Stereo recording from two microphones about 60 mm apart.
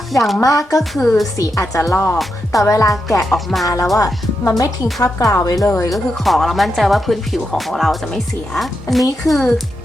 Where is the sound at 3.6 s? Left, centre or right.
Left.